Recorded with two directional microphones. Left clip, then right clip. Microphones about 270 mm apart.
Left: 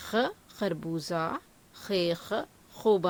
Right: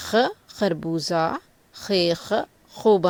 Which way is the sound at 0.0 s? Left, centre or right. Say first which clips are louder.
Right 8 dB; centre.